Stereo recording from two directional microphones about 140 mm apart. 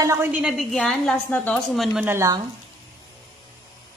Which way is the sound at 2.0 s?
15° right (ahead or behind).